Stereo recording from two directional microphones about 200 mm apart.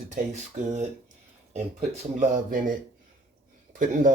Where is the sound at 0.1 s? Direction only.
40° right (ahead or behind).